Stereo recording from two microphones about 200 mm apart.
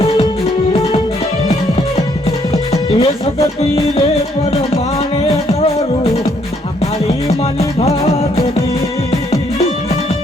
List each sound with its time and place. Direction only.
2.9 s music: 30° left (ahead or behind)
5.5 s music: 30° left (ahead or behind)
7.8 s music: 30° left (ahead or behind)